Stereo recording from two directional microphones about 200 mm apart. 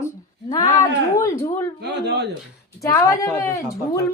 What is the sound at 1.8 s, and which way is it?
Speech, 55° right (ahead or behind).